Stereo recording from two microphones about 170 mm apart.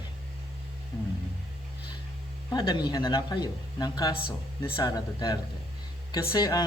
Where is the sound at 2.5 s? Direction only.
25° left (ahead or behind).